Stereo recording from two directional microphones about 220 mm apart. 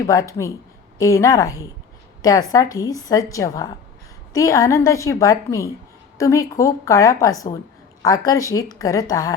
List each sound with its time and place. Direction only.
0.0 s a woman's voice: 15° left (ahead or behind)